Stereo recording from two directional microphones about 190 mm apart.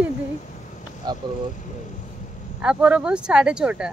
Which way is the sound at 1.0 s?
20° right (ahead or behind).